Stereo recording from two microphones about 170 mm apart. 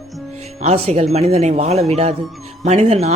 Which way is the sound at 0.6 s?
40° right (ahead or behind).